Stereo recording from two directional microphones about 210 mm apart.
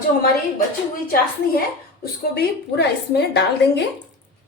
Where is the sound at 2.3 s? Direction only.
50° left (ahead or behind).